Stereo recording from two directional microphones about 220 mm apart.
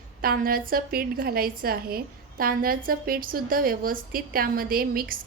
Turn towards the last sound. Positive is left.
turn(degrees=-40)  # may be behind; listen again after turning